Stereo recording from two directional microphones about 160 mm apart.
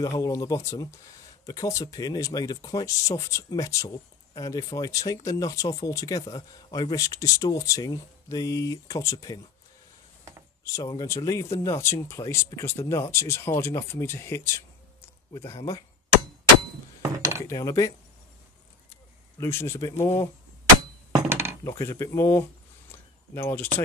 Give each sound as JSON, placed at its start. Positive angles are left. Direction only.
{"t": 0.0, "sound": "speech", "side_deg": 20}
{"t": 10.6, "sound": "speech", "side_deg": 20}
{"t": 17.0, "sound": "cutlery", "side_deg": -20}
{"t": 17.5, "sound": "speech", "side_deg": 20}
{"t": 19.4, "sound": "speech", "side_deg": 15}
{"t": 21.3, "sound": "a sound", "side_deg": -15}
{"t": 21.6, "sound": "a sound", "side_deg": 15}